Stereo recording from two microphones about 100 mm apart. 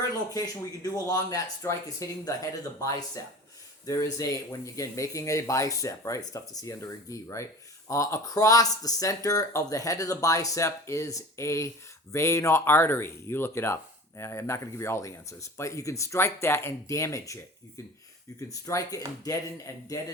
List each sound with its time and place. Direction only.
0.3 s speech: 40° left (ahead or behind)